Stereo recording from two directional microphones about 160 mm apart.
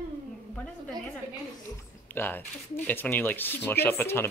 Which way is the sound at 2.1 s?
10° left (ahead or behind).